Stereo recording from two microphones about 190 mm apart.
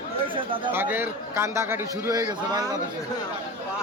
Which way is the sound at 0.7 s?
10° right (ahead or behind).